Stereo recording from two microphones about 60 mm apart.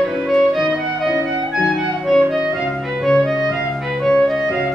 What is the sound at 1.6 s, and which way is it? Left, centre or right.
Clarinet, centre.